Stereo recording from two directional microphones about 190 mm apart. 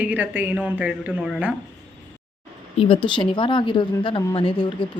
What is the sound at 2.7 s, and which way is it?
Speech, 25° left (ahead or behind).